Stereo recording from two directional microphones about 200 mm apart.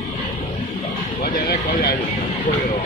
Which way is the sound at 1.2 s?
45° left (ahead or behind).